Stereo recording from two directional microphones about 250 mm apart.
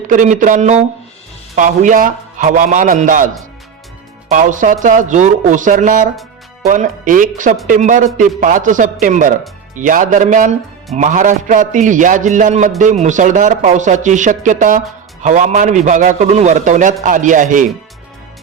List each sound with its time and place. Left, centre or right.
0.1 s speech: right
4.3 s speech: right